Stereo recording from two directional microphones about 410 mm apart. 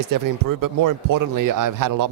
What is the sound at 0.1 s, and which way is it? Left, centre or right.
A man's voice, right.